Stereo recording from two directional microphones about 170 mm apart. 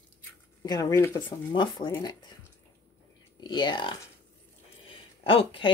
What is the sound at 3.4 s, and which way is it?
Speech, 25° left (ahead or behind).